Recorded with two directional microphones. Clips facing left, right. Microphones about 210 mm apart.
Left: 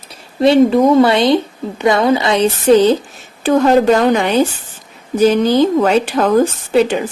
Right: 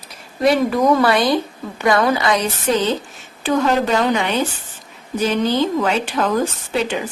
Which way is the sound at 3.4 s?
45° left (ahead or behind).